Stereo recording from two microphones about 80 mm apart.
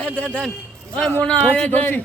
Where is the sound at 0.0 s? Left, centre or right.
Centre.